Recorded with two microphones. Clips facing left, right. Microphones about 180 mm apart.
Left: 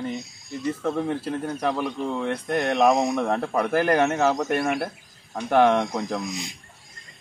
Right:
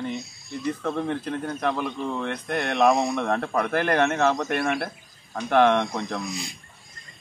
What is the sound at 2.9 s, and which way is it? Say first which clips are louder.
Speech: left 1 dB; 20° left (ahead or behind).